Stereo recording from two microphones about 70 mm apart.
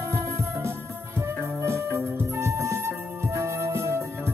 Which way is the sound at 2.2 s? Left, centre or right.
Right.